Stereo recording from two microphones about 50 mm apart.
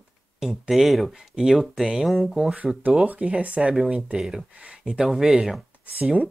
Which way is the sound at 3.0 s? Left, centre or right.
Right.